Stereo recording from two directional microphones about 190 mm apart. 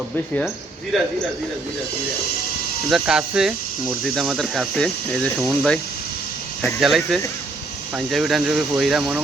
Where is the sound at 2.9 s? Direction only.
5° right (ahead or behind).